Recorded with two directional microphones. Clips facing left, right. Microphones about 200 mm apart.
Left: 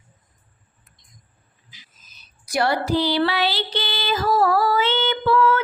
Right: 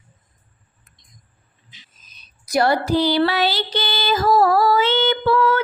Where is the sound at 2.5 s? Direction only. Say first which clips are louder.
Right 3 dB; 40° right (ahead or behind).